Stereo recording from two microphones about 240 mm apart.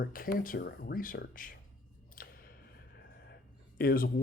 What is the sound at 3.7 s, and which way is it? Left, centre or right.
Speech, left.